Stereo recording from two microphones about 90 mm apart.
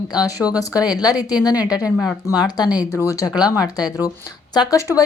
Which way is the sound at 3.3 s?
45° left (ahead or behind).